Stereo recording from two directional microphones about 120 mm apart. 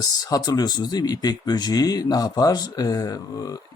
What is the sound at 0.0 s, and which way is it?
Speech, 30° left (ahead or behind).